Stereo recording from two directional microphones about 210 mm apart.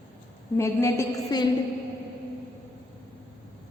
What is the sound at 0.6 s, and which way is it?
Speech, 15° left (ahead or behind).